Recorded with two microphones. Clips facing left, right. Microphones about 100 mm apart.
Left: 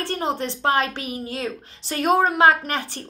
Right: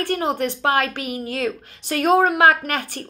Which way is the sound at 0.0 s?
25° left (ahead or behind).